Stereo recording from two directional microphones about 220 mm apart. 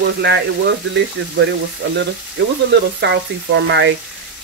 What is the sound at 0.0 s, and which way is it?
Speech, 50° right (ahead or behind).